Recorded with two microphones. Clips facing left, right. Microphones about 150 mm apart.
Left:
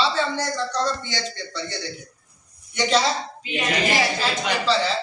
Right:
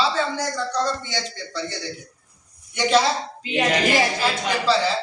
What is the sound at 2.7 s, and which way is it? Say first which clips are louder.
Speech: right 2 dB; 10° right (ahead or behind).